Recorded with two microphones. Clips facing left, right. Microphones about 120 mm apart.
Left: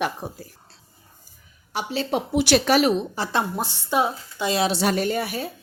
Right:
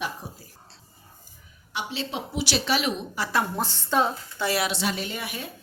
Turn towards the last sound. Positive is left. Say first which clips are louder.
# left 9 dB
turn(degrees=40)  # may be behind; listen again after turning